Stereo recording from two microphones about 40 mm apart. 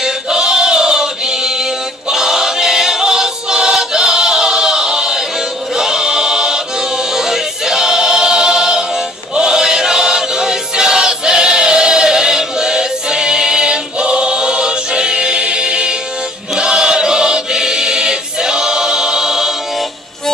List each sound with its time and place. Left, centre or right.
0.0 s choir: centre